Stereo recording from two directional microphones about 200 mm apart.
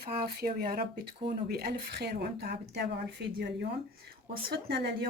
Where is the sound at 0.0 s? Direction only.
50° right (ahead or behind).